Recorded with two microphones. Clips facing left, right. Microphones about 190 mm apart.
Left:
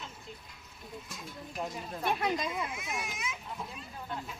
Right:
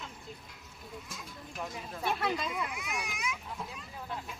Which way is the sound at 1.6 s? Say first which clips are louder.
Left 1 dB; 15° left (ahead or behind).